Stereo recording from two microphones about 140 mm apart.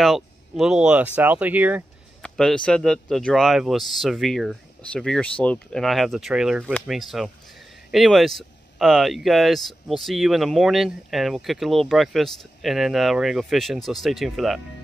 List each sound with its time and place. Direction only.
0.0 s speech: centre (ahead or behind)
2.2 s speech: 5° left (ahead or behind)